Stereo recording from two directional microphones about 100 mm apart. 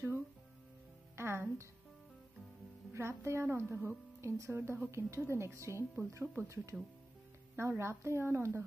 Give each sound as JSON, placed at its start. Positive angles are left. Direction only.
{"t": 1.1, "sound": "music", "side_deg": -25}
{"t": 2.9, "sound": "a woman's voice", "side_deg": -25}